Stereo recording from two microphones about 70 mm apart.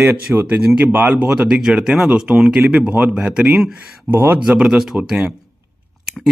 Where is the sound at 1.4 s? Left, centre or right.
Centre.